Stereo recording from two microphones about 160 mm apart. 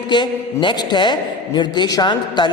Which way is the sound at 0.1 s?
30° left (ahead or behind).